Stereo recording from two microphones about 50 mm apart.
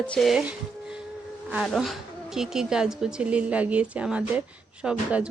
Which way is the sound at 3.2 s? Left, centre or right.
Right.